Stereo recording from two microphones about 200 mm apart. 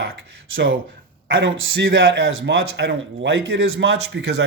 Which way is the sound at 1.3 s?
65° right (ahead or behind).